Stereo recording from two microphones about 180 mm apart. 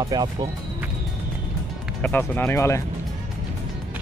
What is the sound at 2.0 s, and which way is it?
Speech, 10° left (ahead or behind).